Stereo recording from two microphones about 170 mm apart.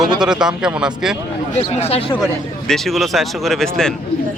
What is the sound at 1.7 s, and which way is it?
Speech, 35° left (ahead or behind).